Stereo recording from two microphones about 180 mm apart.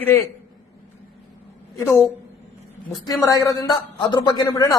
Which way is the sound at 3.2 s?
20° left (ahead or behind).